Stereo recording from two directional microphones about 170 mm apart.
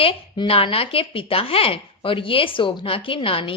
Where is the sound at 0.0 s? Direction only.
30° left (ahead or behind).